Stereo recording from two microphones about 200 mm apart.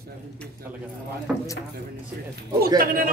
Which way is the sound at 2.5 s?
45° right (ahead or behind).